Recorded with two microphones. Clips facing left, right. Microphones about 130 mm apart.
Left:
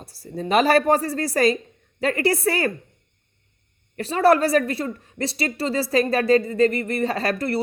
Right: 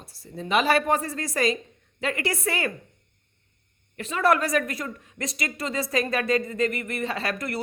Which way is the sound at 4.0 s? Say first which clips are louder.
Left 5 dB; 35° left (ahead or behind).